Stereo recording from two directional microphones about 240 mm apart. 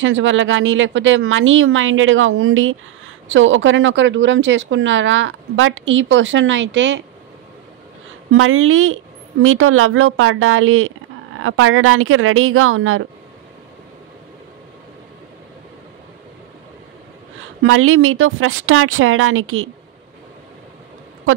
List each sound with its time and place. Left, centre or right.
0.0 s speech: right
8.3 s a woman's voice: right
17.6 s a woman's voice: right